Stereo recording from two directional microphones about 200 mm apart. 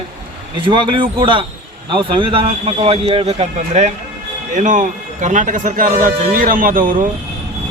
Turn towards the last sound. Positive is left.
turn(degrees=-45)  # may be behind; listen again after turning